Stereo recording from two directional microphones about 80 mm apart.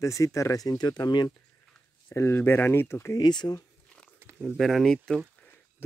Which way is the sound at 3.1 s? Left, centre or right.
Left.